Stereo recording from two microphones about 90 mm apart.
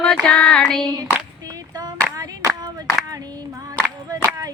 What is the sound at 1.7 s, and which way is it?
Clapping, 45° right (ahead or behind).